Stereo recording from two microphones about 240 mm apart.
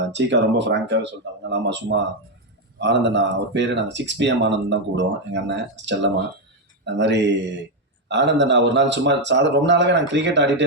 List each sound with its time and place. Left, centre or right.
0.1 s speech: right